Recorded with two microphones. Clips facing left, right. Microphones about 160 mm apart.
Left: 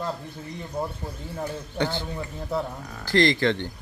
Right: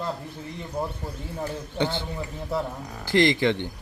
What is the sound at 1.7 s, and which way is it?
A man's voice, 20° right (ahead or behind).